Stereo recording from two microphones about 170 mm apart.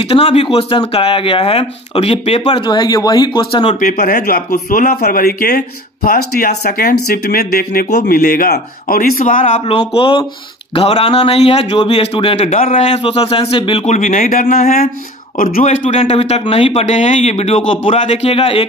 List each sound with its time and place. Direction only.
0.0 s speech: 35° left (ahead or behind)
3.8 s speech: 60° left (ahead or behind)
8.2 s speech: 55° left (ahead or behind); by 13.8 s 30° left (ahead or behind)
13.8 s speech: 45° left (ahead or behind)